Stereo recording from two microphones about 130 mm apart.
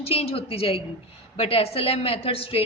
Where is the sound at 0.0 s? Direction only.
50° left (ahead or behind).